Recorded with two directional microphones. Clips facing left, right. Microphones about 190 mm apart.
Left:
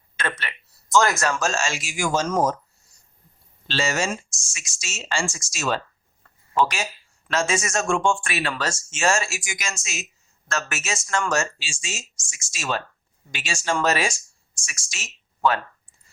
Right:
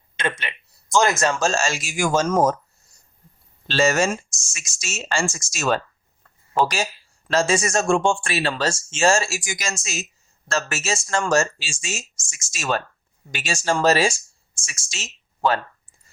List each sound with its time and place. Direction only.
0.2 s a sound: 15° right (ahead or behind)
1.2 s speech: 25° right (ahead or behind); by 2.6 s 50° right (ahead or behind)
3.7 s speech: 45° right (ahead or behind)
6.5 s speech: 35° right (ahead or behind)